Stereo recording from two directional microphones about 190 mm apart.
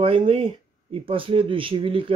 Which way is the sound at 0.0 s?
25° right (ahead or behind).